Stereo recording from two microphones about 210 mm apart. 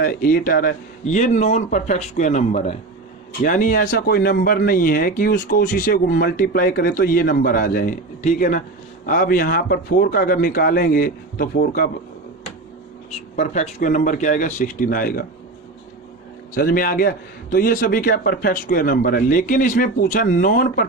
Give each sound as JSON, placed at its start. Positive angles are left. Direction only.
{"t": 0.0, "sound": "a man's voice", "side_deg": 45}
{"t": 13.1, "sound": "a man's voice", "side_deg": 35}
{"t": 16.6, "sound": "speech", "side_deg": 45}